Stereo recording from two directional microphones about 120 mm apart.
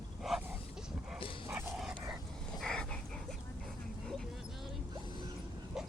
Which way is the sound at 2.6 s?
5° left (ahead or behind).